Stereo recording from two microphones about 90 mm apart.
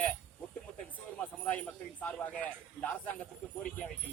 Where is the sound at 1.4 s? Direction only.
15° left (ahead or behind).